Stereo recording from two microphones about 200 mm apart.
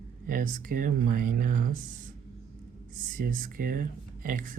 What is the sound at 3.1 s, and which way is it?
Speech, 45° right (ahead or behind).